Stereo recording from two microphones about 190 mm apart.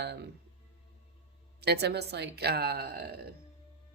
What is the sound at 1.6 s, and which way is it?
Speech, 60° right (ahead or behind).